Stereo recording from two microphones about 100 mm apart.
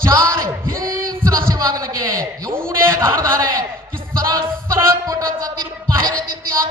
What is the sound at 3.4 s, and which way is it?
Speech, 40° right (ahead or behind).